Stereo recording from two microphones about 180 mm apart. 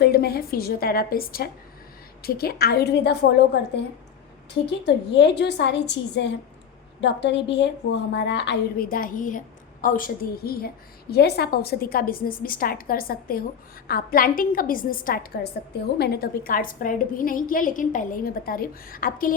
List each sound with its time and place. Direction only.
0.0 s a woman's voice: 60° left (ahead or behind)
4.9 s a woman's voice: 75° left (ahead or behind)
8.9 s a woman's voice: 50° left (ahead or behind)